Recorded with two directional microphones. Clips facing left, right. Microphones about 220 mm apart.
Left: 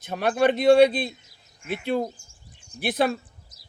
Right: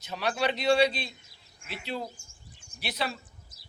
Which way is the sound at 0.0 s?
55° left (ahead or behind).